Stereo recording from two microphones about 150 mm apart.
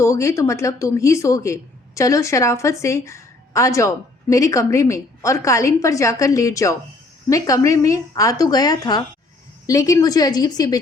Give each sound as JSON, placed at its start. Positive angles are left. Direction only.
{"t": 0.0, "sound": "a woman's voice", "side_deg": 20}